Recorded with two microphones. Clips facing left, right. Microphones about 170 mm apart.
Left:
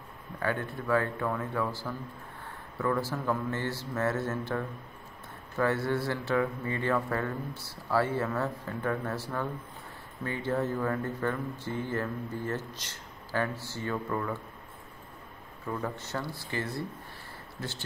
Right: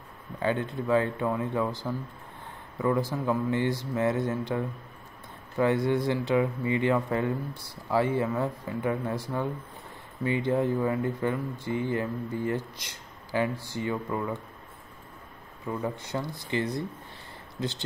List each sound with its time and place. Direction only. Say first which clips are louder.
0.4 s speech: right 4 dB; 20° right (ahead or behind)
15.6 s speech: right 3 dB; 15° right (ahead or behind)